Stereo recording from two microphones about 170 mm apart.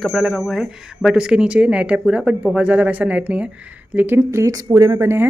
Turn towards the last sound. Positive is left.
turn(degrees=-15)  # may be behind; listen again after turning